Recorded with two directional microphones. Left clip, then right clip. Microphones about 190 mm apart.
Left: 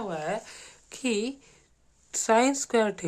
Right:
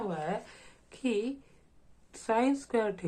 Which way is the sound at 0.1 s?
35° left (ahead or behind).